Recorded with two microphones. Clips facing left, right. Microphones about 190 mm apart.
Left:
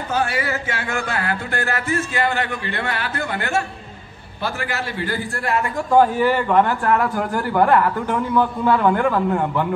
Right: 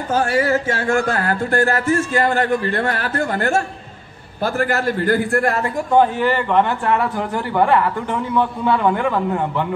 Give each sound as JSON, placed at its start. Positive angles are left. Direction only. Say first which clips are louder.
{"t": 0.1, "sound": "speech", "louder": "right 6 dB", "side_deg": -40}
{"t": 5.9, "sound": "a man's voice", "louder": "even", "side_deg": 5}